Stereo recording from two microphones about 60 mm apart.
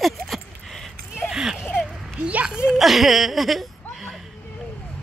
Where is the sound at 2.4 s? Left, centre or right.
Centre.